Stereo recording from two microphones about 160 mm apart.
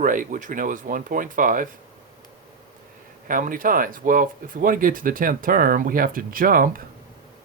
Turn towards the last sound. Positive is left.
turn(degrees=-60)  # may be behind; listen again after turning